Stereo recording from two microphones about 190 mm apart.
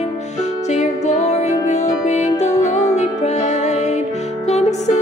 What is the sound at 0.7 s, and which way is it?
Music, 35° left (ahead or behind).